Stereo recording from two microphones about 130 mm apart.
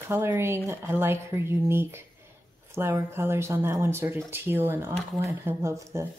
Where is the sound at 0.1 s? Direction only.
15° right (ahead or behind).